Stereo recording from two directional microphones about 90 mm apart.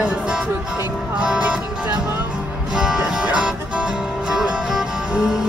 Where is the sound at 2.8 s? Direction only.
10° right (ahead or behind).